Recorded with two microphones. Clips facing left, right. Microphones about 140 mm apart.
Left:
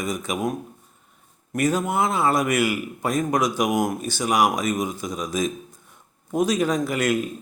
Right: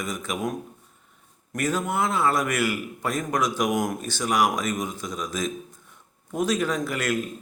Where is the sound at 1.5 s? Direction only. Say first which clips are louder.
Left 4 dB; 15° left (ahead or behind).